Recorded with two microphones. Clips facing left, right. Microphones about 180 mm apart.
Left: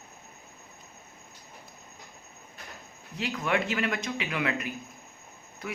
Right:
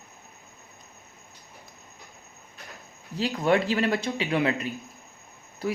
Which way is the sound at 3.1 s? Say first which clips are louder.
Right 6 dB; 35° right (ahead or behind).